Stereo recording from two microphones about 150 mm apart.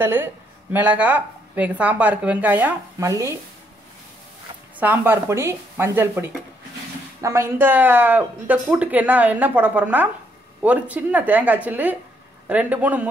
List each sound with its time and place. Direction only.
0.0 s speech: 15° right (ahead or behind)
3.0 s speech: 20° right (ahead or behind)
4.7 s speech: 10° right (ahead or behind)